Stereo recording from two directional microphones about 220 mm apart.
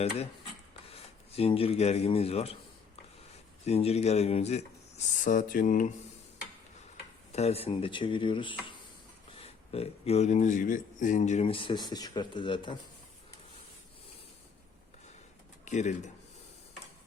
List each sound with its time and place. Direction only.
0.9 s a sound: 25° left (ahead or behind)
3.7 s speech: 30° left (ahead or behind)
7.3 s speech: 30° left (ahead or behind)
15.6 s speech: 35° left (ahead or behind)